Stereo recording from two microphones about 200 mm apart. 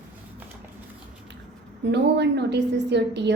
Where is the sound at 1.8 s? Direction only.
60° right (ahead or behind).